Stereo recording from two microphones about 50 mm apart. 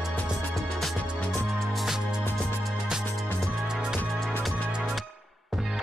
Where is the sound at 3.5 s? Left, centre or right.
Centre.